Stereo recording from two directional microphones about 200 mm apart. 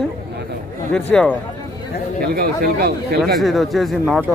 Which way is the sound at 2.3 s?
50° right (ahead or behind).